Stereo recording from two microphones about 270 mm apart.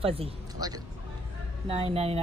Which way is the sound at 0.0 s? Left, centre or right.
Right.